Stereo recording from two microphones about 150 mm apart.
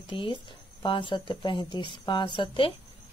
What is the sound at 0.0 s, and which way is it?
Speech, 35° left (ahead or behind).